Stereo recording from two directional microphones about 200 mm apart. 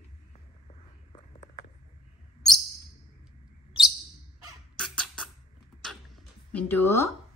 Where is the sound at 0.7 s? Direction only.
30° left (ahead or behind).